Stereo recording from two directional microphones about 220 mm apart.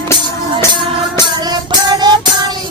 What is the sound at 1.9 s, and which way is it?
Music, 20° right (ahead or behind).